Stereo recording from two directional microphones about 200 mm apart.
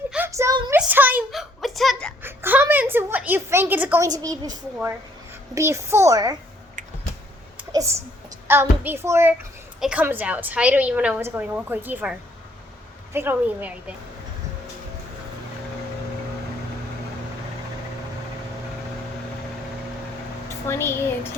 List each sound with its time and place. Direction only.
0.1 s a sound: 10° right (ahead or behind)
2.2 s a sound: 10° right (ahead or behind)
5.5 s a woman's voice: 15° right (ahead or behind)
7.7 s a child's voice: 15° right (ahead or behind)
13.1 s a woman's voice: 10° right (ahead or behind)
20.7 s speech: 10° left (ahead or behind)